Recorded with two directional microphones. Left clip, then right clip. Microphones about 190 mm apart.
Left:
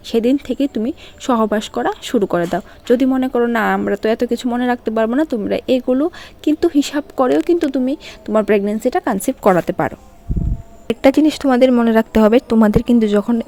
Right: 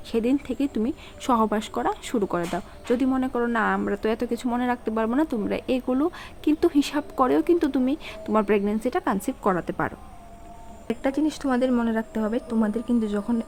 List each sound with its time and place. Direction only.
0.1 s speech: 30° left (ahead or behind)
11.0 s speech: 45° left (ahead or behind)